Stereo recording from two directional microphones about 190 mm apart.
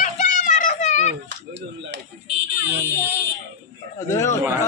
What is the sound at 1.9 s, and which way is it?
Speech, 70° right (ahead or behind).